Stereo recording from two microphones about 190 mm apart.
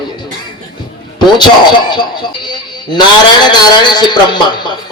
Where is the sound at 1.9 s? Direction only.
25° left (ahead or behind).